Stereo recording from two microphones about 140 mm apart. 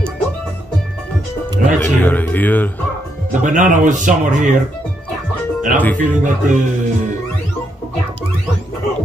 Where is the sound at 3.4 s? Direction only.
65° right (ahead or behind).